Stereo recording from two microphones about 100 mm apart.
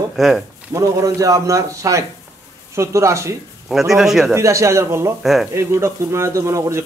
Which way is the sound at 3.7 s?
5° right (ahead or behind).